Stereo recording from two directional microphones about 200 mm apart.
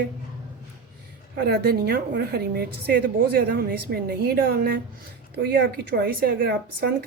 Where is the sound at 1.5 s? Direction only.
50° right (ahead or behind).